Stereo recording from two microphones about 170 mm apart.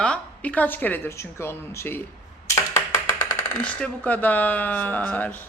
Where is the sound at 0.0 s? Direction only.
5° left (ahead or behind).